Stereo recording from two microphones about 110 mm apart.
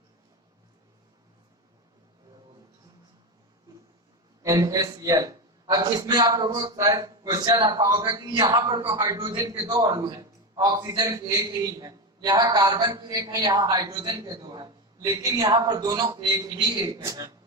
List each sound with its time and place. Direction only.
4.4 s a man's voice: 30° right (ahead or behind)
10.0 s a man's voice: 30° right (ahead or behind)